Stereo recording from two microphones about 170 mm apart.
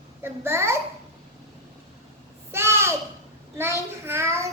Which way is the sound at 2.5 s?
15° right (ahead or behind).